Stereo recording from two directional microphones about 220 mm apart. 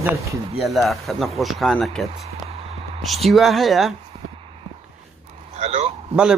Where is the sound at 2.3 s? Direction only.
30° right (ahead or behind).